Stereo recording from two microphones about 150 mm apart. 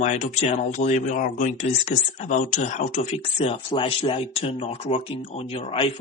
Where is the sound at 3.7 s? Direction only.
30° left (ahead or behind).